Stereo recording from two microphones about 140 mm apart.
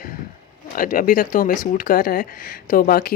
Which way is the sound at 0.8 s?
75° left (ahead or behind).